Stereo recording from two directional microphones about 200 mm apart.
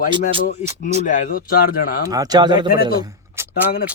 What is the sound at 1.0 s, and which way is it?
Speech, 40° left (ahead or behind).